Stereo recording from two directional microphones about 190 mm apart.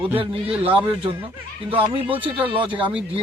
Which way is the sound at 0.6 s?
30° right (ahead or behind).